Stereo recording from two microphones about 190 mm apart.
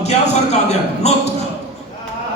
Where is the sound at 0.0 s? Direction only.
35° left (ahead or behind).